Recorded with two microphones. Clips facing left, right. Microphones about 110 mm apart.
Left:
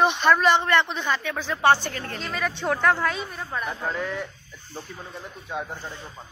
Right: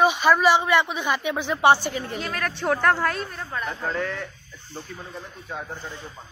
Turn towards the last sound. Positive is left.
turn(degrees=5)  # may be behind; listen again after turning